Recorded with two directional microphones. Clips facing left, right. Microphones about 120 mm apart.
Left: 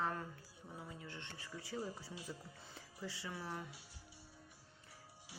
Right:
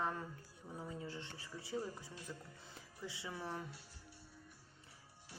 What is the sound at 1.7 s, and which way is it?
Speech, 10° left (ahead or behind).